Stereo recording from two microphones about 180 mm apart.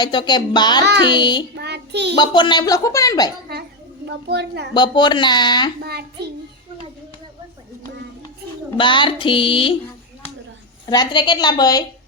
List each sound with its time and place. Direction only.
0.0 s speech: 25° left (ahead or behind)
1.5 s child singing: 65° right (ahead or behind)
2.1 s speech: 25° left (ahead or behind)
4.3 s a woman's voice: 70° right (ahead or behind)
4.7 s speech: 25° left (ahead or behind)
5.8 s a child's voice: 60° right (ahead or behind)
8.8 s speech: 25° left (ahead or behind)
10.8 s speech: 25° left (ahead or behind)